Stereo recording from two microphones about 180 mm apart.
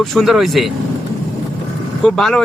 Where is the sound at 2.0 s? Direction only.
5° left (ahead or behind).